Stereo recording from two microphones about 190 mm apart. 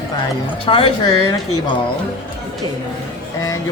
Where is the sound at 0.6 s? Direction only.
30° left (ahead or behind).